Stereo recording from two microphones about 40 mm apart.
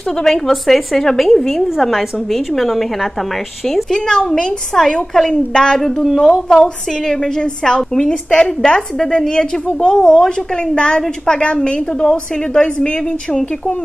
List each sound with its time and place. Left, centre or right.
0.2 s a woman's voice: centre
3.9 s a woman's voice: centre